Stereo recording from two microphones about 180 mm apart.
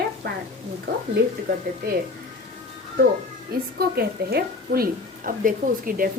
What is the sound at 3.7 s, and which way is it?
A woman's voice, 60° right (ahead or behind).